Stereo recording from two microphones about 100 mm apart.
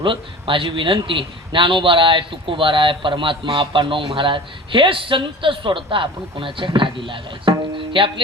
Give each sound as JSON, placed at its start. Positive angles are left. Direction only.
{"t": 0.0, "sound": "a man's voice", "side_deg": -55}